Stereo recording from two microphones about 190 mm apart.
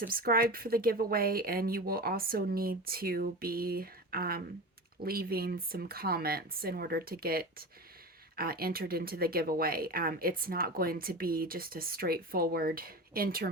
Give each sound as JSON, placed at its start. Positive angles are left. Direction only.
{"t": 0.0, "sound": "speech", "side_deg": -50}